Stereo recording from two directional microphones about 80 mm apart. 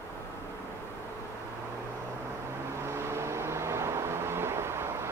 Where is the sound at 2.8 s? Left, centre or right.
Right.